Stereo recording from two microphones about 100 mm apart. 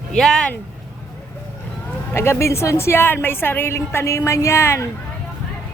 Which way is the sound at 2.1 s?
25° left (ahead or behind).